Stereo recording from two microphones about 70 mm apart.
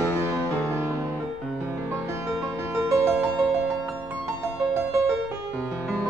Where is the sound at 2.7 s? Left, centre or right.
Right.